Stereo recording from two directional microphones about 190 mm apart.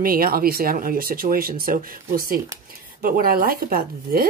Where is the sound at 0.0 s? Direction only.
50° right (ahead or behind).